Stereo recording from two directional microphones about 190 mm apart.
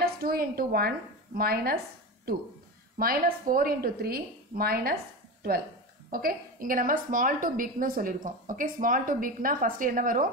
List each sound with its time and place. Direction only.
0.0 s a woman's voice: 50° right (ahead or behind)
6.0 s a woman's voice: 50° right (ahead or behind)